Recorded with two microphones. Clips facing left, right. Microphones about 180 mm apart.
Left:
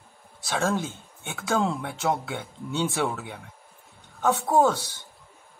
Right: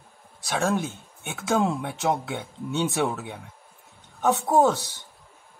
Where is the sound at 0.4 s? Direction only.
15° right (ahead or behind).